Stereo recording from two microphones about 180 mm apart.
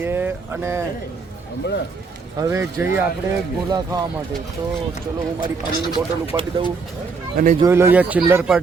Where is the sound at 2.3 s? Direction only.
15° right (ahead or behind).